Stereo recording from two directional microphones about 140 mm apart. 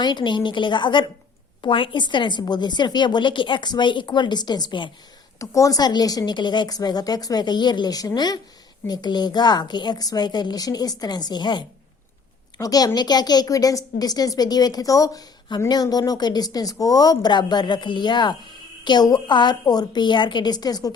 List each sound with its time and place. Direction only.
0.0 s a woman's voice: 30° left (ahead or behind)